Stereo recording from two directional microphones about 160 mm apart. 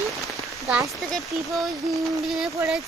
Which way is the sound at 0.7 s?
Centre (ahead or behind).